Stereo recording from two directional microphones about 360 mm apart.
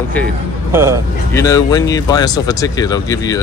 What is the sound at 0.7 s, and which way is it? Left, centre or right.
Speech, centre.